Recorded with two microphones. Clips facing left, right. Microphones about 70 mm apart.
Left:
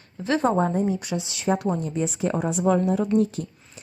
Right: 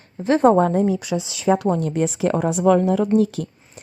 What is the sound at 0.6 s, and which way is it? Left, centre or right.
Speech, right.